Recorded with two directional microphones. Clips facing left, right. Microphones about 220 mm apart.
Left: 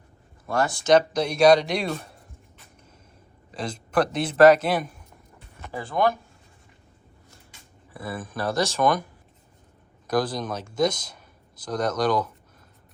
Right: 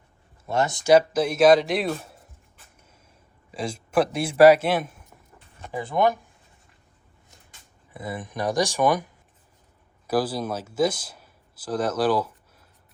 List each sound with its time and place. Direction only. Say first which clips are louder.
0.4 s speech: even; 20° right (ahead or behind)
0.9 s speech: right 2 dB; 5° right (ahead or behind)
3.5 s a man's voice: right 1 dB; 5° right (ahead or behind)
5.7 s speech: right 1 dB; 20° right (ahead or behind)
7.9 s a man's voice: right 1 dB; 20° right (ahead or behind)
10.1 s speech: right 1 dB; 5° right (ahead or behind)